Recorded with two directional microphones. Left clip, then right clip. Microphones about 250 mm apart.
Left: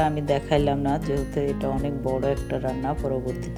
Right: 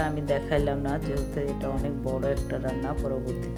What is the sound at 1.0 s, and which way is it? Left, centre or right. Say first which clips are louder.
Speech: left 4 dB; centre.